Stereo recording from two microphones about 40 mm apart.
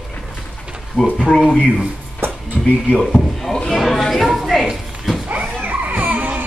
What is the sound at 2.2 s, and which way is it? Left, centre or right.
Music, right.